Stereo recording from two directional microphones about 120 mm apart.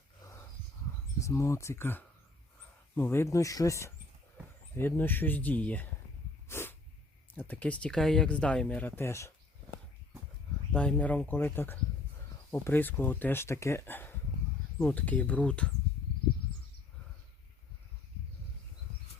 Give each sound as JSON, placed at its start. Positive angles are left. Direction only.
{"t": 0.2, "sound": "dog", "side_deg": 30}
{"t": 1.2, "sound": "speech", "side_deg": 25}
{"t": 6.5, "sound": "sneeze", "side_deg": 20}
{"t": 7.3, "sound": "speech", "side_deg": 15}
{"t": 10.7, "sound": "speech", "side_deg": 10}